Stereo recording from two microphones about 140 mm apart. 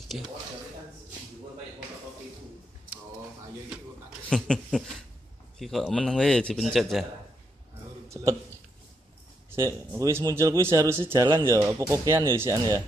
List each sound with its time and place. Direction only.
4.3 s speech: 5° left (ahead or behind)
8.1 s a sound: 20° right (ahead or behind)
9.6 s speech: 20° right (ahead or behind)